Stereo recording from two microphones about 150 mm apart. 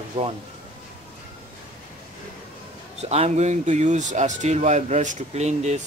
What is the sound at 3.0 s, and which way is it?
Speech, 45° right (ahead or behind).